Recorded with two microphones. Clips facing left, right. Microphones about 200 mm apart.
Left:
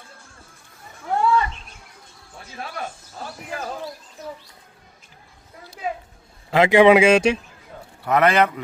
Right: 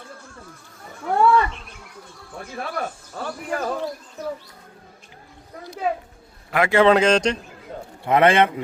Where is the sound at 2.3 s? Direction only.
55° right (ahead or behind).